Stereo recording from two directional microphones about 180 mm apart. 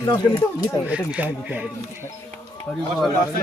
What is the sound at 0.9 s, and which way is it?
Speech, 5° right (ahead or behind).